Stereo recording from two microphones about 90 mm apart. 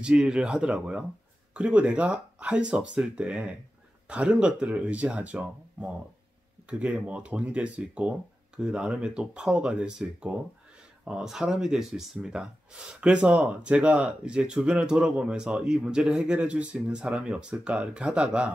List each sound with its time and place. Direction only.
0.0 s speech: 10° right (ahead or behind)